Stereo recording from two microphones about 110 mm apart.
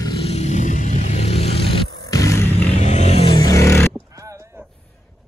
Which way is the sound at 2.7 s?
90° left.